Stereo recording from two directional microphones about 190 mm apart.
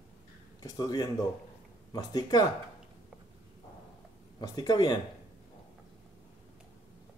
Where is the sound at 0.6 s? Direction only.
20° left (ahead or behind).